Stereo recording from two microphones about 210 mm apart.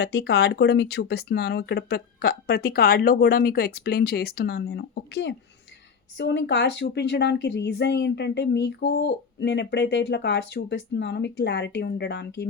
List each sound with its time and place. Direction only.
0.0 s a woman's voice: 50° left (ahead or behind)